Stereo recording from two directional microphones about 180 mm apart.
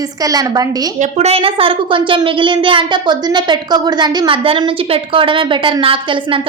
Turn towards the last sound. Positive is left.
turn(degrees=-30)  # may be behind; listen again after turning